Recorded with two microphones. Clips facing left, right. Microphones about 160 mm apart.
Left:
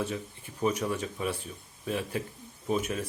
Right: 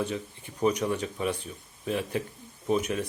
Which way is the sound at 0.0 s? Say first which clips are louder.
Right 2 dB; 5° left (ahead or behind).